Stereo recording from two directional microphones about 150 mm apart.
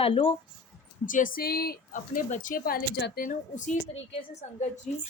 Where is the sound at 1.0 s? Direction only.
60° left (ahead or behind).